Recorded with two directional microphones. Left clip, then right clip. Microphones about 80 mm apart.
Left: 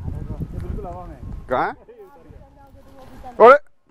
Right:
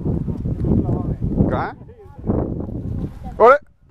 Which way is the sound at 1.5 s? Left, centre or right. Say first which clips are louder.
Left 7 dB; centre.